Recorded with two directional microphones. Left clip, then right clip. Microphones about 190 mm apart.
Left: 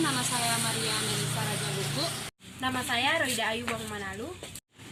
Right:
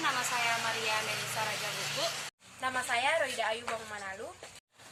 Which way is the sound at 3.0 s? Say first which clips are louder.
Left 4 dB; 15° right (ahead or behind).